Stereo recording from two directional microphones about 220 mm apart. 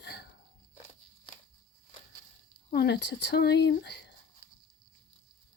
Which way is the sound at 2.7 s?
50° left (ahead or behind).